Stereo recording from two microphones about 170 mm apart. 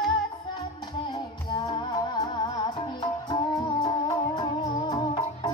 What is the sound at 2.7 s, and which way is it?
Music, 35° left (ahead or behind).